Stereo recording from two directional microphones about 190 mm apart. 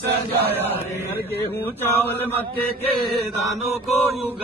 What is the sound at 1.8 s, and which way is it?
Mantra, 10° left (ahead or behind).